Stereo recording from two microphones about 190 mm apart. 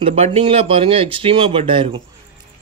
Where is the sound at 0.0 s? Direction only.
30° right (ahead or behind).